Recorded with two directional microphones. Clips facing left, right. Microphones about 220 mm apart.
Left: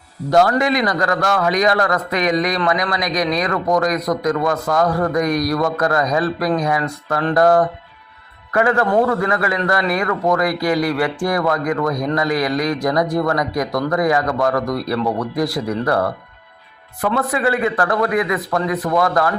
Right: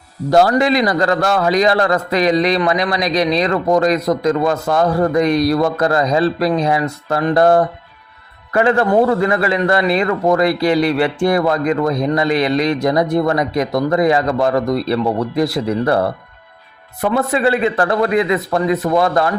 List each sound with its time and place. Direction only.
0.3 s a man's voice: 30° right (ahead or behind)
17.2 s speech: 25° right (ahead or behind)